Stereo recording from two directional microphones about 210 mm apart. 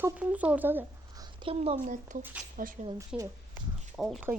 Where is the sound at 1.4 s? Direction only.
30° right (ahead or behind).